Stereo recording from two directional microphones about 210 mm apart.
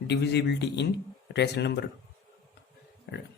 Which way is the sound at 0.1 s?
55° left (ahead or behind).